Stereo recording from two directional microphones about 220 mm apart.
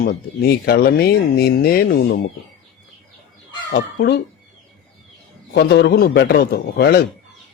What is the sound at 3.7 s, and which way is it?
Speech, 45° left (ahead or behind).